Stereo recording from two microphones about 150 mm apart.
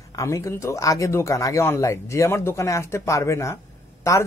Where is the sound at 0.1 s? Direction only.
20° left (ahead or behind).